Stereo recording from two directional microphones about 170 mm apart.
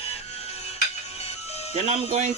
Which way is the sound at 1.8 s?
40° right (ahead or behind).